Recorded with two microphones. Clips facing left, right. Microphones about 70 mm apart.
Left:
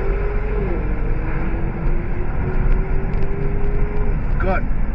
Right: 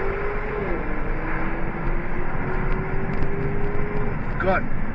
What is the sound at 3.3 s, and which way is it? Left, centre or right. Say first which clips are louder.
Vehicle: left 1 dB; right.